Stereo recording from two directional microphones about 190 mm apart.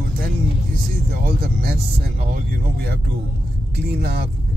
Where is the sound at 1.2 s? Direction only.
55° right (ahead or behind).